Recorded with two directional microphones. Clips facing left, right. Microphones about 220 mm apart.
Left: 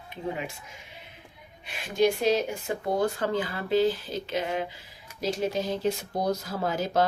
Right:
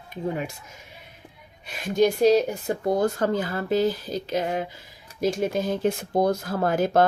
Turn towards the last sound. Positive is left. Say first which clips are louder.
# right 5 dB
turn(degrees=-55)  # may be behind; listen again after turning